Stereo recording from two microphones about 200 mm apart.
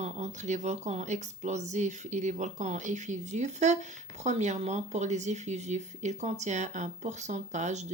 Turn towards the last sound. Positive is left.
turn(degrees=-35)  # may be behind; listen again after turning